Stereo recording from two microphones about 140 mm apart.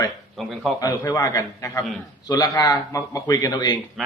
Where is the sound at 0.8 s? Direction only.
25° left (ahead or behind).